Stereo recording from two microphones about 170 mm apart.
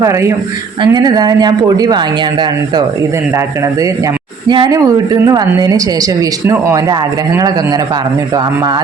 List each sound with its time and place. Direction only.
0.0 s a woman's voice: 15° right (ahead or behind)
4.4 s speech: 25° right (ahead or behind)